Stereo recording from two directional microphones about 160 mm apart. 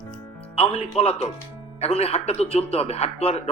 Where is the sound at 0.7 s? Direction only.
40° left (ahead or behind).